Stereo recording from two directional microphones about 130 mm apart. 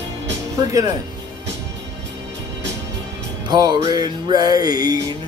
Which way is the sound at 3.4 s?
30° right (ahead or behind).